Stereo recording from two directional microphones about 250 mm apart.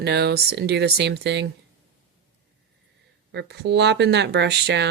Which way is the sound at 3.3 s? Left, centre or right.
Right.